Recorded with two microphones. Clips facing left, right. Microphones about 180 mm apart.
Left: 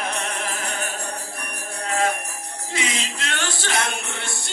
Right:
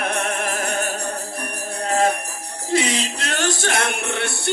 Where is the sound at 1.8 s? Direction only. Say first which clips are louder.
Right 4 dB; 35° right (ahead or behind).